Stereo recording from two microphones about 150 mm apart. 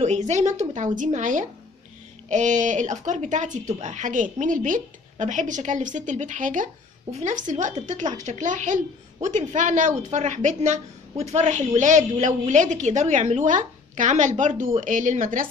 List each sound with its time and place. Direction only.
0.0 s a woman's voice: 50° right (ahead or behind)